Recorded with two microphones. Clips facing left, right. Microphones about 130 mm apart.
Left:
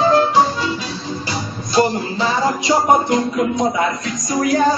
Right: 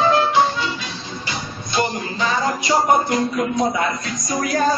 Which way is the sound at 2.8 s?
20° left (ahead or behind).